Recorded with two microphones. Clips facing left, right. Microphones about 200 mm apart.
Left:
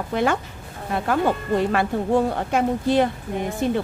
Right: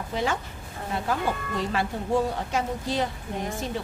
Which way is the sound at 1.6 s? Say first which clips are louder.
Left 7 dB; 55° left (ahead or behind).